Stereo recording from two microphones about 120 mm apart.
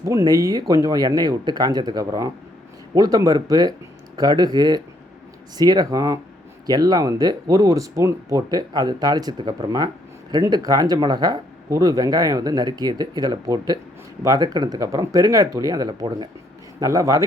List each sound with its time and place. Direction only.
0.0 s speech: 25° right (ahead or behind)